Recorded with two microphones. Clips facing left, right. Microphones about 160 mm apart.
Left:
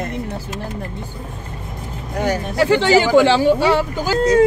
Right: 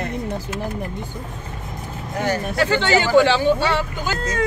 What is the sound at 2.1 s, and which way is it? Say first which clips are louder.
Speech: left 3 dB; 10° left (ahead or behind).